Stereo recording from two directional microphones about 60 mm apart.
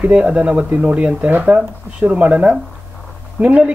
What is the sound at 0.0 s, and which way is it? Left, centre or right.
Speech, centre.